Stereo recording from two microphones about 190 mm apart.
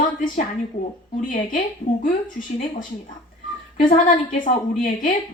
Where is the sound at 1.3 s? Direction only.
45° left (ahead or behind).